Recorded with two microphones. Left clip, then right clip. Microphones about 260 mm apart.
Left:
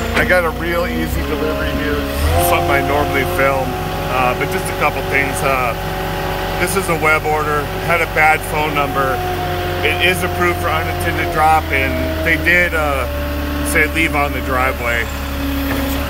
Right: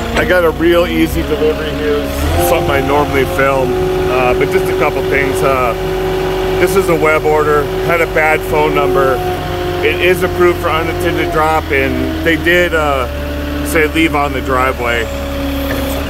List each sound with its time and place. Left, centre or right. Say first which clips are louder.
0.2 s speech: right 4 dB; right
2.5 s speech: right 4 dB; right